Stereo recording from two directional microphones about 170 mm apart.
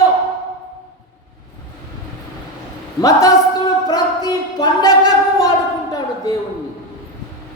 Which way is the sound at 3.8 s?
20° left (ahead or behind).